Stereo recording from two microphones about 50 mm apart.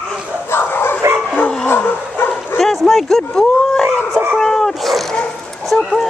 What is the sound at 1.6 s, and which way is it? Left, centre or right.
Dog, left.